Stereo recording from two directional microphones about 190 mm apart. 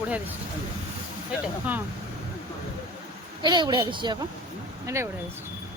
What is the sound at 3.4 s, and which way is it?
A woman's voice, 25° right (ahead or behind).